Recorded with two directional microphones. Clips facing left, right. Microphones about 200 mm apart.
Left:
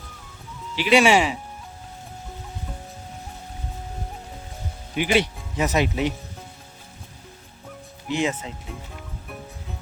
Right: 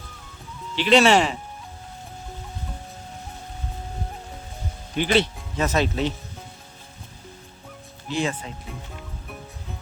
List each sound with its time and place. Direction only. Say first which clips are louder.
0.8 s speech: even; 10° left (ahead or behind)
4.9 s speech: even; 10° left (ahead or behind)
8.0 s speech: left 2 dB; 20° left (ahead or behind)